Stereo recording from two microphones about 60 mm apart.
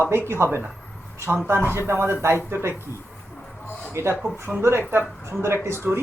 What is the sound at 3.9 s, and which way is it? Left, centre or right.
A man's voice, right.